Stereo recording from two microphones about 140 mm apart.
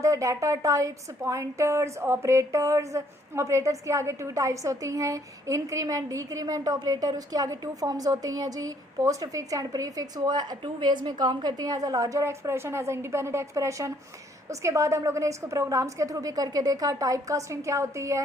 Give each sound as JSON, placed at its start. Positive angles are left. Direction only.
{"t": 0.0, "sound": "a woman's voice", "side_deg": -20}